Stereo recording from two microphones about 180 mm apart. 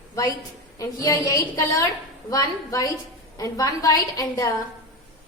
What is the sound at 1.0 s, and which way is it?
A woman's voice, 20° left (ahead or behind).